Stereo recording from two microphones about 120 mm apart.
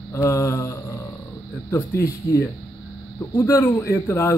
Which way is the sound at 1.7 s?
20° left (ahead or behind).